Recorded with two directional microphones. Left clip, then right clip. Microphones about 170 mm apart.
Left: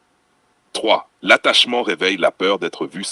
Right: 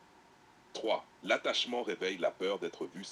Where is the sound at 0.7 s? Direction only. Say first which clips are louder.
Left 17 dB; 55° left (ahead or behind).